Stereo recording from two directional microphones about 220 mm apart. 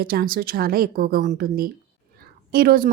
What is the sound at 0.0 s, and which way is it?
A woman's voice, 45° right (ahead or behind).